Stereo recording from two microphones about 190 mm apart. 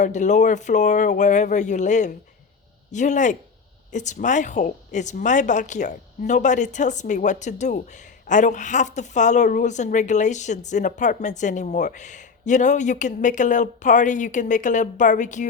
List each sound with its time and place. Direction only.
0.0 s a woman's voice: 40° left (ahead or behind)